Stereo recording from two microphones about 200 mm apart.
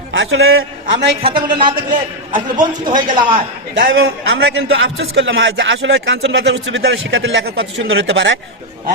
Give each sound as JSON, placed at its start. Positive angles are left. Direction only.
{"t": 0.1, "sound": "a man's voice", "side_deg": -75}
{"t": 1.2, "sound": "speech", "side_deg": -25}
{"t": 3.8, "sound": "a man's voice", "side_deg": -65}